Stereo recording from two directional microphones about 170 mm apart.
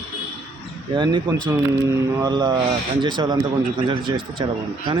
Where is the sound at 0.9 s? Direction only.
30° right (ahead or behind).